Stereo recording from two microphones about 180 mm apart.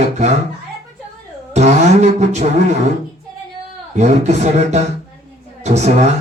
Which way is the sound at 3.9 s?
40° right (ahead or behind).